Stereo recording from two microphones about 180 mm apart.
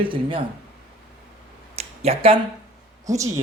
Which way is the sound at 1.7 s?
35° right (ahead or behind).